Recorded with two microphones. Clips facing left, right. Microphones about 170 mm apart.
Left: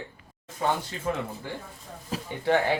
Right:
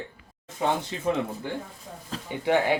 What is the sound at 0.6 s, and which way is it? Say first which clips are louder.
Speech: right 1 dB; 20° right (ahead or behind).